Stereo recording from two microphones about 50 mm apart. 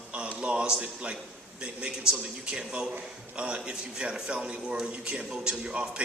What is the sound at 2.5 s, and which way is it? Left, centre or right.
A man's voice, centre.